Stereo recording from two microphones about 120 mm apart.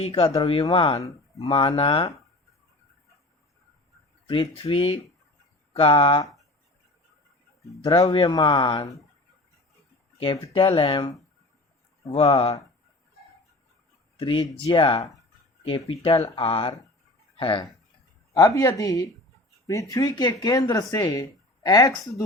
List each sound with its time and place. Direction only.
0.6 s speech: 45° left (ahead or behind)
4.3 s speech: 50° left (ahead or behind)
7.9 s speech: 45° left (ahead or behind)
10.2 s speech: 50° left (ahead or behind)
12.1 s speech: 50° left (ahead or behind)
14.2 s speech: 45° left (ahead or behind)
18.3 s speech: 25° left (ahead or behind)